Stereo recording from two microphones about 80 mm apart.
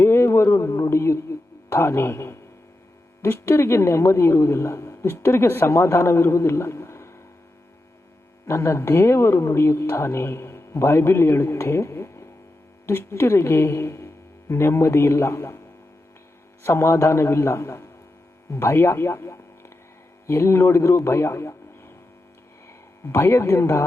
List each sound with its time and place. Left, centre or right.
0.0 s a sound: left
3.2 s a woman's voice: left
8.4 s a woman's voice: left
16.6 s a woman's voice: left
23.0 s a woman's voice: left